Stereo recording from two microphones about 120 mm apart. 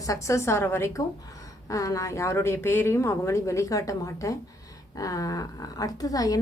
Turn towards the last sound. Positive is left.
turn(degrees=30)  # may be behind; listen again after turning